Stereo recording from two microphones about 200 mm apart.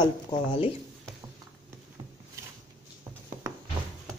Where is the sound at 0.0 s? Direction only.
25° left (ahead or behind).